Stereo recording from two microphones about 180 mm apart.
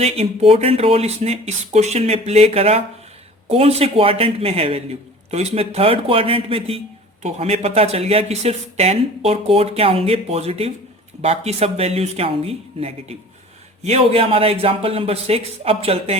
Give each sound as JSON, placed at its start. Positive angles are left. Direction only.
{"t": 0.0, "sound": "a man's voice", "side_deg": -35}